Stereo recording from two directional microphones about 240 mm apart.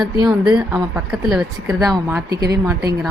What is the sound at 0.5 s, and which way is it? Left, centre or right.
Speech, centre.